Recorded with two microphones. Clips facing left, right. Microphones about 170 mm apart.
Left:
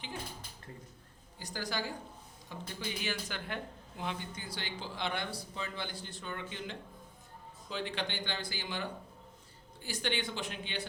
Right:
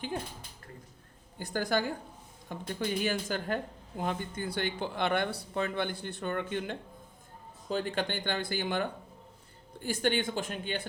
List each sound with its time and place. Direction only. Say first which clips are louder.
1.4 s speech: right 8 dB; 55° right (ahead or behind)